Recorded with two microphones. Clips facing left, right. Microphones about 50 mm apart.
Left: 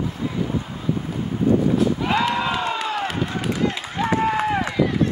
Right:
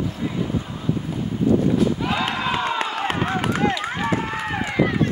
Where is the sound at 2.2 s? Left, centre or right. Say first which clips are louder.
Left 1 dB; right.